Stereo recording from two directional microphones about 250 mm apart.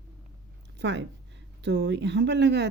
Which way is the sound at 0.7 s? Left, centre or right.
Right.